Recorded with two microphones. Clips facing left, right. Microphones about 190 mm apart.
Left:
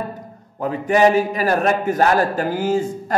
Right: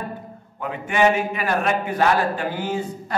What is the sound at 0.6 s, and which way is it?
A man's voice, 35° left (ahead or behind).